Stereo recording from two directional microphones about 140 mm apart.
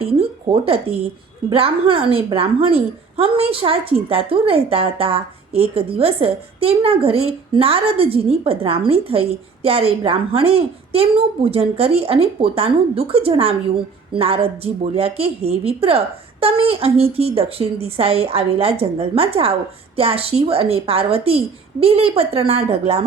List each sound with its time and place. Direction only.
0.0 s a woman's voice: 40° right (ahead or behind)